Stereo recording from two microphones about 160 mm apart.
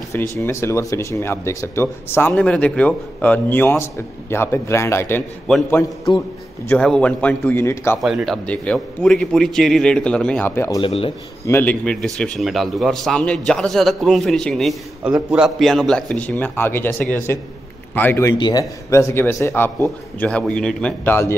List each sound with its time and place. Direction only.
0.1 s speech: 15° left (ahead or behind)
6.7 s speech: 5° left (ahead or behind)
8.0 s a man's voice: centre (ahead or behind); by 10.8 s 15° left (ahead or behind)
10.8 s speech: 35° left (ahead or behind)
11.4 s a man's voice: 10° left (ahead or behind)